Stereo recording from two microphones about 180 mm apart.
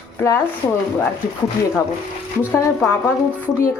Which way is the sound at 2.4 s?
15° left (ahead or behind).